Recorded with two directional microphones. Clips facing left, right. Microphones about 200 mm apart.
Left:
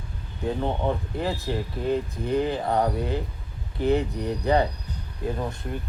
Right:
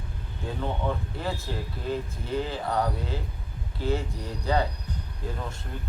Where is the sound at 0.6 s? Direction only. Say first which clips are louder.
Left 1 dB; 20° left (ahead or behind).